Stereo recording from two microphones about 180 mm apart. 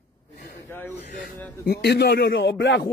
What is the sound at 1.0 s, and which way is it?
Speech, 45° left (ahead or behind).